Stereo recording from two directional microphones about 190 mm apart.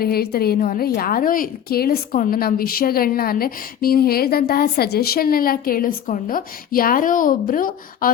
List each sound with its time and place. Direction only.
0.0 s a woman's voice: 55° left (ahead or behind)